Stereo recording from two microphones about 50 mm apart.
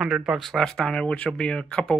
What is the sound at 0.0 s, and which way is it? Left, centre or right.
Speech, centre.